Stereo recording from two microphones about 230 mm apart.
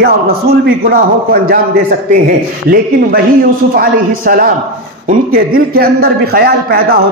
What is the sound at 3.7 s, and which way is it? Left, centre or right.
A man's voice, right.